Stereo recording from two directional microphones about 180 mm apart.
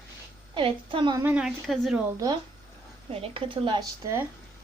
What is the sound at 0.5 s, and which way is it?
Speech, 30° right (ahead or behind).